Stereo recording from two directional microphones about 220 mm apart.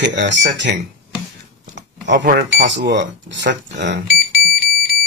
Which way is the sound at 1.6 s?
50° right (ahead or behind).